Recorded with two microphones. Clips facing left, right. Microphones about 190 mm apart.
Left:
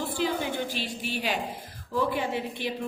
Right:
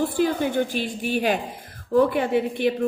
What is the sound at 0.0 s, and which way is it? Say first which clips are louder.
A woman's voice: right 7 dB; 50° right (ahead or behind).